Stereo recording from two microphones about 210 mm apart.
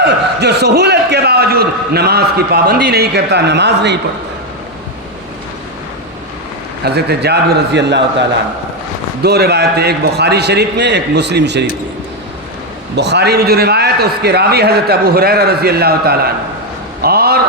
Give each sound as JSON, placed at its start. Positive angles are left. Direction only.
{"t": 0.3, "sound": "a man's voice", "side_deg": -50}
{"t": 6.8, "sound": "a man's voice", "side_deg": -50}
{"t": 9.2, "sound": "a man's voice", "side_deg": -50}
{"t": 13.0, "sound": "a man's voice", "side_deg": -55}
{"t": 17.0, "sound": "a sound", "side_deg": -50}